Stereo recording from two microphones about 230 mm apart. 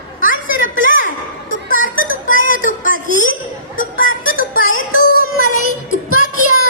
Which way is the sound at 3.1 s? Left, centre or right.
Left.